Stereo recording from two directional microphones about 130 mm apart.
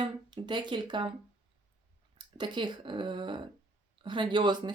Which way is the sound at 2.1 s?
35° right (ahead or behind).